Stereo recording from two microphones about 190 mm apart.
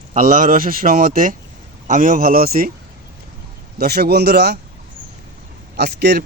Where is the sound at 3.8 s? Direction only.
55° right (ahead or behind).